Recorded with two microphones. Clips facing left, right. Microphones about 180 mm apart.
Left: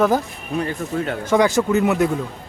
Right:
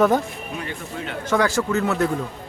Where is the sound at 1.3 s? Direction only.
20° left (ahead or behind).